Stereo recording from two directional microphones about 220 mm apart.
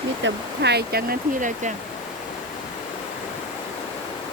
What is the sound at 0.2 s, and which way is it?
Speech, 55° right (ahead or behind).